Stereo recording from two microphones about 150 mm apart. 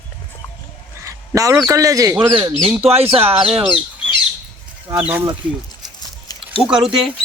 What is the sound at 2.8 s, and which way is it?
Speech, 40° right (ahead or behind).